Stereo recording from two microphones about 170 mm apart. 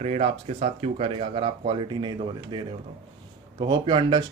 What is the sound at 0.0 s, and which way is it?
Speech, 40° right (ahead or behind).